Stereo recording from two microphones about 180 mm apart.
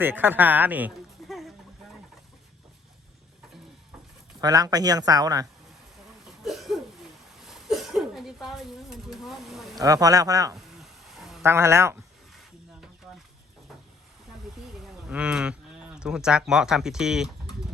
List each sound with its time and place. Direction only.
0.0 s speech: 10° right (ahead or behind)
4.4 s speech: 20° right (ahead or behind)
6.2 s a sound: centre (ahead or behind)
9.7 s speech: 20° right (ahead or behind)
10.8 s stir: centre (ahead or behind)
11.4 s speech: 15° right (ahead or behind)
12.3 s snake: centre (ahead or behind)
14.7 s speech: centre (ahead or behind)